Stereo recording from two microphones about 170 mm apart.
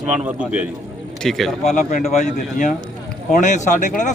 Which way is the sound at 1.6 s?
50° left (ahead or behind).